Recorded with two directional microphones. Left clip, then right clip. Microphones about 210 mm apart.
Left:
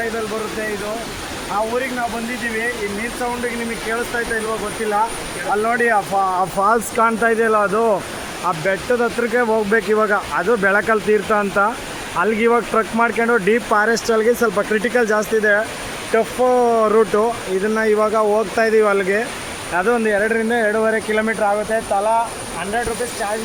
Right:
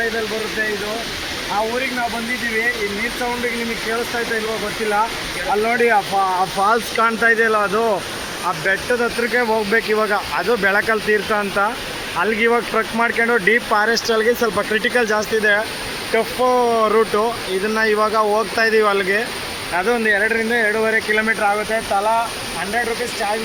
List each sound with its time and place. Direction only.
6.3 s speech: 40° left (ahead or behind)